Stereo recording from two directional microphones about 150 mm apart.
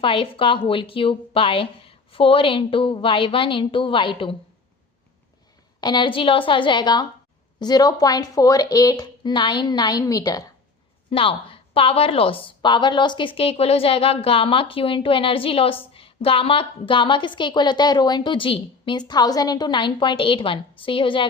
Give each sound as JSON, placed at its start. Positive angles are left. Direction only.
{"t": 0.0, "sound": "a woman's voice", "side_deg": 35}
{"t": 5.8, "sound": "a woman's voice", "side_deg": 30}
{"t": 11.1, "sound": "a woman's voice", "side_deg": 35}